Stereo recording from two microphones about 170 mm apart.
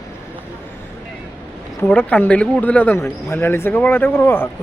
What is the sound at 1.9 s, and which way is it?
Speech, 10° left (ahead or behind).